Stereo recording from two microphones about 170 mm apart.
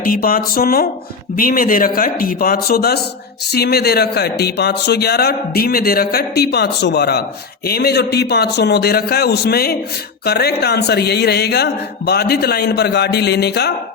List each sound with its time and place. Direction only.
0.0 s a man's voice: 60° left (ahead or behind)